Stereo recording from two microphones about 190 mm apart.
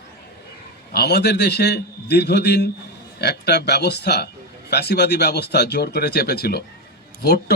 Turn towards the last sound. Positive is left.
turn(degrees=60)  # may be behind; listen again after turning